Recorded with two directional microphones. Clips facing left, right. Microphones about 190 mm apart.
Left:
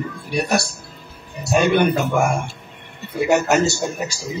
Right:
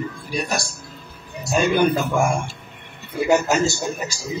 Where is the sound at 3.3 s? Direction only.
70° left (ahead or behind).